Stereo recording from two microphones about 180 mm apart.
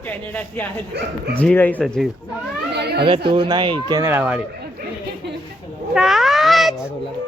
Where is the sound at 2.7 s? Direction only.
65° right (ahead or behind).